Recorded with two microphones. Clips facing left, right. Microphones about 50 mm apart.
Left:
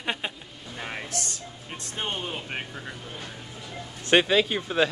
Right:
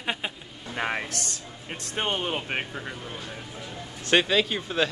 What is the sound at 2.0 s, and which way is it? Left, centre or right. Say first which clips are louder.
Speech: right 4 dB; right.